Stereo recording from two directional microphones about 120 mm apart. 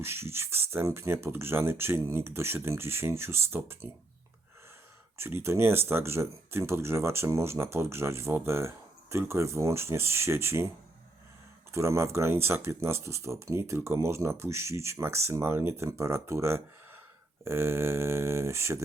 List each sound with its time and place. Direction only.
0.0 s speech: 20° right (ahead or behind)
5.1 s speech: 20° right (ahead or behind)
11.7 s speech: 25° right (ahead or behind)